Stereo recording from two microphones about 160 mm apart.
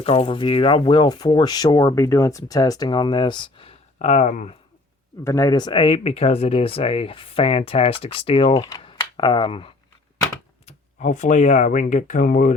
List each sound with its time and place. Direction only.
0.0 s speech: 35° left (ahead or behind)
3.9 s speech: 45° left (ahead or behind)
5.2 s speech: 20° left (ahead or behind)
10.7 s speech: 50° left (ahead or behind)